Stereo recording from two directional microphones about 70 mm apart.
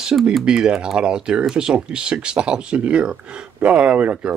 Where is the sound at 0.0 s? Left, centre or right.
Centre.